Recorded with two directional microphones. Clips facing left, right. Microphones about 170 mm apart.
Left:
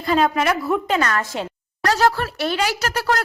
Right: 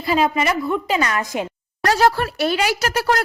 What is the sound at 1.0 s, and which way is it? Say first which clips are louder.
A woman's voice: right 1 dB; 15° right (ahead or behind).